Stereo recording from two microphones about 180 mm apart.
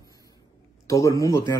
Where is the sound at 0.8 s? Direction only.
20° left (ahead or behind).